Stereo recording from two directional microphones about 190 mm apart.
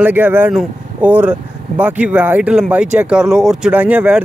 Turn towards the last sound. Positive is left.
turn(degrees=-10)  # may be behind; listen again after turning